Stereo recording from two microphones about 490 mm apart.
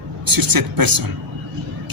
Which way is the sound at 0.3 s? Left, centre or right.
Right.